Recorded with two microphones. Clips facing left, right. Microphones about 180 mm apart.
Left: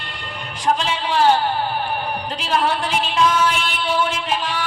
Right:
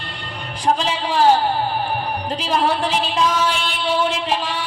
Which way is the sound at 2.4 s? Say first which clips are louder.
Right 1 dB; 35° right (ahead or behind).